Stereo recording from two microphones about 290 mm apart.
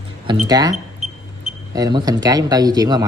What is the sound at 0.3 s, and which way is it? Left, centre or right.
Speech, centre.